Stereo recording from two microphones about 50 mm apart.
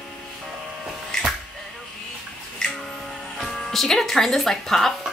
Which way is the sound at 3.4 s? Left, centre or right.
Centre.